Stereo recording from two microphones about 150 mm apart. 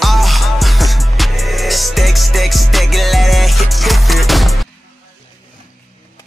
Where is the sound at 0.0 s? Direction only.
Centre (ahead or behind).